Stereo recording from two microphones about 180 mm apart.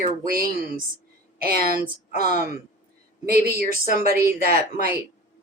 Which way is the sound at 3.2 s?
55° right (ahead or behind).